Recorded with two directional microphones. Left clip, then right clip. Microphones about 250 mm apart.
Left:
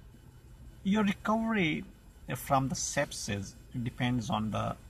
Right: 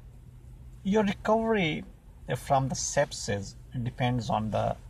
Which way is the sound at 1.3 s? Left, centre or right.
Centre.